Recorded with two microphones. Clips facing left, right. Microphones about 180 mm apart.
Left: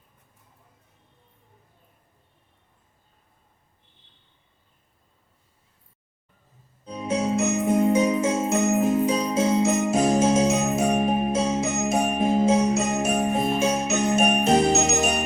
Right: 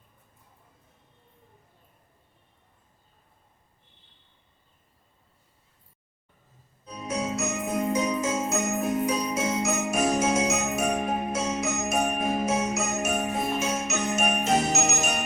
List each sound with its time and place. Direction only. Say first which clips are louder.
6.8 s jingle bell: left 5 dB; 30° left (ahead or behind)